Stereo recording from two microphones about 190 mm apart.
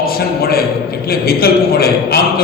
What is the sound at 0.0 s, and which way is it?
A man's voice, 55° left (ahead or behind).